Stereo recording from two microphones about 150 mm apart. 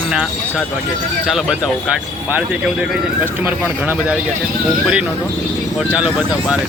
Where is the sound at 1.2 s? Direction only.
Centre (ahead or behind).